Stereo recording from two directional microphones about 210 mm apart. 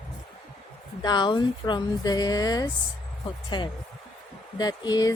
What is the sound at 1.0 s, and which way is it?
Speech, 20° left (ahead or behind).